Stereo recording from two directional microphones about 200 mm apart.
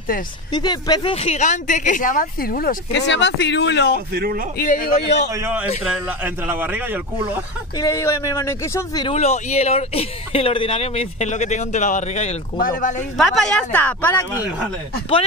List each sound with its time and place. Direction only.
0.5 s speech: 20° left (ahead or behind); by 4.0 s 55° left (ahead or behind)
4.1 s a man's voice: 50° right (ahead or behind)
4.6 s speech: 45° left (ahead or behind)
5.3 s a man's voice: 10° right (ahead or behind)
7.7 s speech: 15° left (ahead or behind)
9.1 s speech: 35° left (ahead or behind)
13.2 s speech: 5° left (ahead or behind)